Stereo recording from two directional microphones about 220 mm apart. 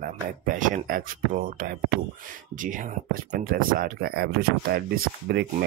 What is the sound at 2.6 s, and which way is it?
Speech, 35° right (ahead or behind).